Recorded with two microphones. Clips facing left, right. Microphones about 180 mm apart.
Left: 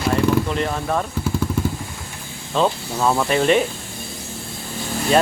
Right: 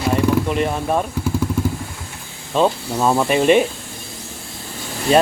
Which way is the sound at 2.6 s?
15° right (ahead or behind).